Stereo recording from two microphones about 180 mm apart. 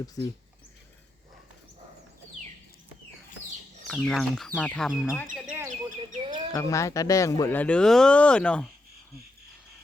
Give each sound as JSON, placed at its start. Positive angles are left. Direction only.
{"t": 3.8, "sound": "speech", "side_deg": 5}
{"t": 5.5, "sound": "chirp", "side_deg": -15}
{"t": 6.1, "sound": "bird", "side_deg": -25}
{"t": 6.5, "sound": "speech", "side_deg": 15}